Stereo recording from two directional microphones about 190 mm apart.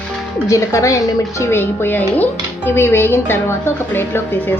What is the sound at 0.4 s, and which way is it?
Speech, 15° left (ahead or behind).